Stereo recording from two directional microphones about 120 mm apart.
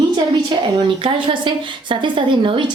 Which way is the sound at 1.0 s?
45° right (ahead or behind).